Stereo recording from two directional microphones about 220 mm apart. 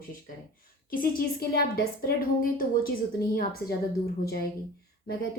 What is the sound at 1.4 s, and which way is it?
A child's voice, 45° left (ahead or behind).